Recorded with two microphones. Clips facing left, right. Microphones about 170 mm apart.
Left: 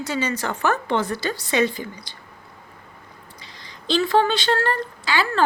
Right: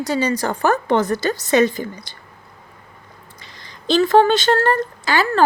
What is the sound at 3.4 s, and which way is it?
A woman's voice, 50° right (ahead or behind).